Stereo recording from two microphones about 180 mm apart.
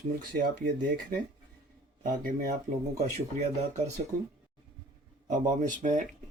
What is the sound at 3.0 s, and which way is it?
Speech, 40° right (ahead or behind).